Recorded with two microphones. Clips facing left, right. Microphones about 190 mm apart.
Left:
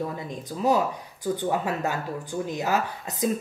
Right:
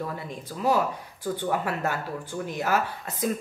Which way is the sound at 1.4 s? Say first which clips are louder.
Even; 15° left (ahead or behind).